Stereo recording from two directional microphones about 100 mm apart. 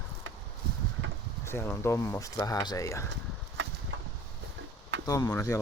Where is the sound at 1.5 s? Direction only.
25° left (ahead or behind).